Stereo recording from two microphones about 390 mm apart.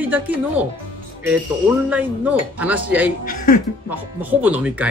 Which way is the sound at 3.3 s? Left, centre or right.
Left.